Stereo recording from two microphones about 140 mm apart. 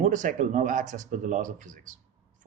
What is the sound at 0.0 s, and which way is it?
Speech, 60° right (ahead or behind).